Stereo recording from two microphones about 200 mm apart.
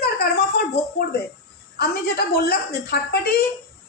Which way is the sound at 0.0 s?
50° left (ahead or behind).